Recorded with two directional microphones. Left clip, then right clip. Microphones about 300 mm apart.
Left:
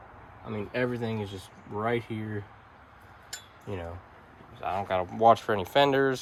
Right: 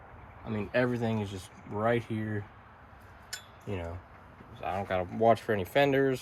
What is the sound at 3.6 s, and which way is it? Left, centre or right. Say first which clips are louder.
Speech: left 1 dB; centre.